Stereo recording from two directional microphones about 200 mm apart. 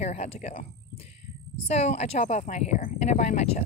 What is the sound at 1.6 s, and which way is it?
Speech, 35° left (ahead or behind).